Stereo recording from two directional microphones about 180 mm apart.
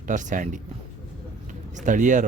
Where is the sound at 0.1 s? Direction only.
45° right (ahead or behind).